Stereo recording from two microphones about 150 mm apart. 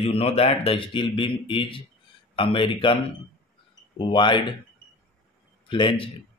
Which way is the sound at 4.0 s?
35° left (ahead or behind).